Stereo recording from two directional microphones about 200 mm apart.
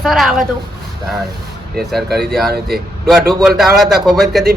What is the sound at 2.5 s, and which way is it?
Speech, 50° right (ahead or behind).